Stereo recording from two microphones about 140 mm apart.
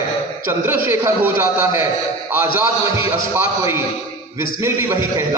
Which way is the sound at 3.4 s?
20° right (ahead or behind).